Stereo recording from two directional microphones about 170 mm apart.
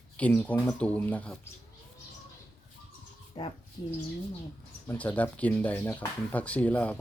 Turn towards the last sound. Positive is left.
turn(degrees=10)  # may be behind; listen again after turning